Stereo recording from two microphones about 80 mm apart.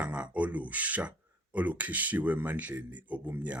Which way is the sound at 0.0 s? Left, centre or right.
Centre.